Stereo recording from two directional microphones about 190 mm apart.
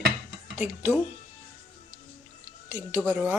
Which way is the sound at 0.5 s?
10° right (ahead or behind).